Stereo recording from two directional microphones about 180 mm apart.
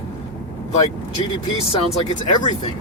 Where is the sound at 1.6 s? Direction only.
30° left (ahead or behind).